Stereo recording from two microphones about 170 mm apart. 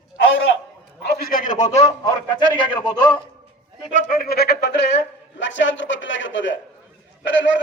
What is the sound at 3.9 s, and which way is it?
A man's voice, 60° left (ahead or behind).